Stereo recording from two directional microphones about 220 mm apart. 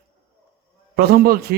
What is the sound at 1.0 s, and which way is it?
Speech, 40° right (ahead or behind).